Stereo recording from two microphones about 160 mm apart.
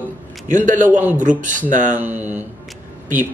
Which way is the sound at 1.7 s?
50° right (ahead or behind).